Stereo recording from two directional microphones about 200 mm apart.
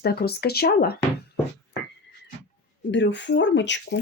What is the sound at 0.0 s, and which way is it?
Speech, 50° left (ahead or behind).